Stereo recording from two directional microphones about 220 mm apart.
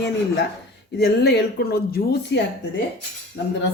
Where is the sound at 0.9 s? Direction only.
50° left (ahead or behind).